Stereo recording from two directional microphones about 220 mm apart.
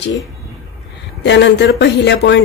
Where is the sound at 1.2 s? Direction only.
55° left (ahead or behind).